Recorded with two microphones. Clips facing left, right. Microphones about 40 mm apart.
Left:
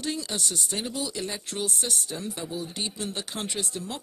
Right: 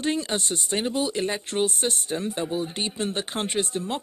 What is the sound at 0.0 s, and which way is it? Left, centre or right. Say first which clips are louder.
Speech: right 5 dB; right.